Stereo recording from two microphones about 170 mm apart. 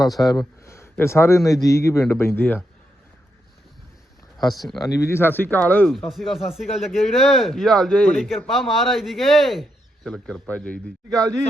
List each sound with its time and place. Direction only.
0.2 s a man's voice: 20° left (ahead or behind)
4.5 s speech: centre (ahead or behind)
4.9 s speech: 15° left (ahead or behind)